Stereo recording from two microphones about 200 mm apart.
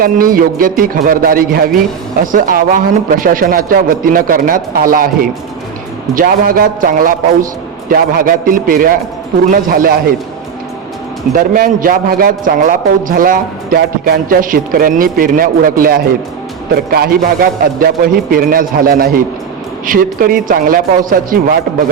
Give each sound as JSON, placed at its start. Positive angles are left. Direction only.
{"t": 0.0, "sound": "a man's voice", "side_deg": -45}
{"t": 6.1, "sound": "a man's voice", "side_deg": -45}
{"t": 11.3, "sound": "a man's voice", "side_deg": -45}